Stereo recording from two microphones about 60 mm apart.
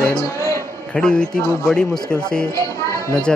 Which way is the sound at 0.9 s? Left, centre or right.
Centre.